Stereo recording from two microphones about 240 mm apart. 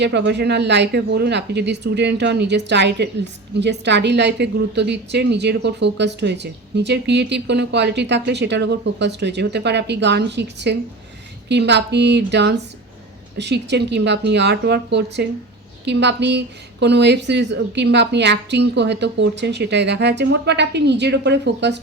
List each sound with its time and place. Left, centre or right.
0.0 s a woman's voice: right